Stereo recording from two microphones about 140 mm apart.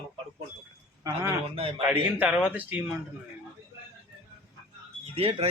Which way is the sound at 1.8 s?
10° right (ahead or behind).